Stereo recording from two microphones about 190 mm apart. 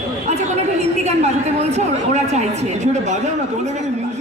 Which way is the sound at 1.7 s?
35° right (ahead or behind).